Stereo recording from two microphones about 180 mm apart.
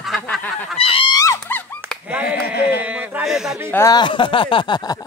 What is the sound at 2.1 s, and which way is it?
Speech, 5° right (ahead or behind).